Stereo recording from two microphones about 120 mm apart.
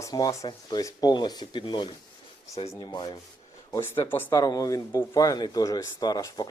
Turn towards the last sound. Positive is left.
turn(degrees=30)  # may be behind; listen again after turning